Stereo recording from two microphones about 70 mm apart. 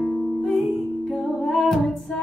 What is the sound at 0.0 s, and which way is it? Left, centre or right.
Music, left.